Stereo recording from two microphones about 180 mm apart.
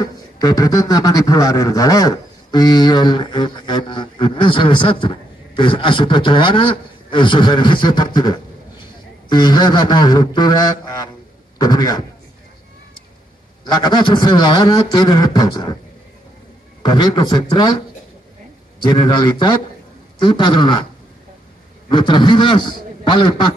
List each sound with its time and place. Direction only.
0.0 s a man's voice: 20° left (ahead or behind)
13.7 s a man's voice: 25° left (ahead or behind)
16.8 s a man's voice: 25° left (ahead or behind)
21.8 s a man's voice: 25° left (ahead or behind)